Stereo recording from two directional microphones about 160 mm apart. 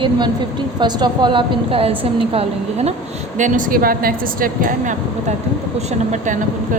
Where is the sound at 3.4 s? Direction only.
55° right (ahead or behind).